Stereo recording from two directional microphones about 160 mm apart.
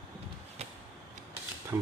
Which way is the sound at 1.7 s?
20° right (ahead or behind).